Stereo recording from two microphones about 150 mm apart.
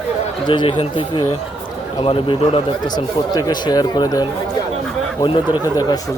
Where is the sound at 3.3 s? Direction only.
25° left (ahead or behind).